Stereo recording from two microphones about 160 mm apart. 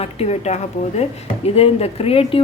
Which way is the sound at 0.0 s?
40° left (ahead or behind).